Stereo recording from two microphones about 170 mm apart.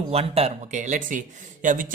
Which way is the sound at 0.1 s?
35° right (ahead or behind).